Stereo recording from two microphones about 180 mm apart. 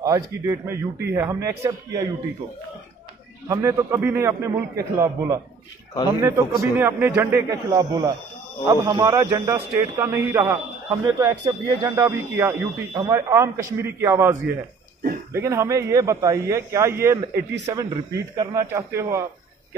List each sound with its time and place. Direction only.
0.0 s a man's voice: 15° right (ahead or behind)
3.4 s a man's voice: 20° right (ahead or behind)
15.3 s a man's voice: 15° right (ahead or behind)